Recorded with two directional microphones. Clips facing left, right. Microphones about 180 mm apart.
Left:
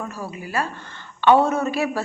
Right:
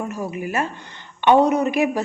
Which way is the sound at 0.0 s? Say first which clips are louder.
Right 5 dB; 20° right (ahead or behind).